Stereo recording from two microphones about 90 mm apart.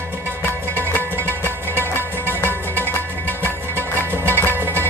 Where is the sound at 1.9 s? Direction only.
25° left (ahead or behind).